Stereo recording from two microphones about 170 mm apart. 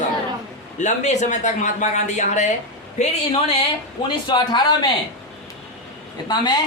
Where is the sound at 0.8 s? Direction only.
45° left (ahead or behind).